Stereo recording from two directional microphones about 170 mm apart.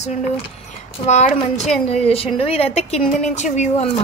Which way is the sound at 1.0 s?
40° left (ahead or behind).